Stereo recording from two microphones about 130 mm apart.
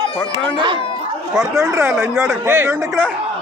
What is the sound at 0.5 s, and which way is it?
Speech, 35° right (ahead or behind).